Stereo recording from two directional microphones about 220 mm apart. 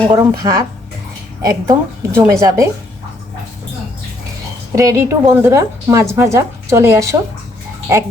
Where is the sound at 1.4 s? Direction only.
15° right (ahead or behind).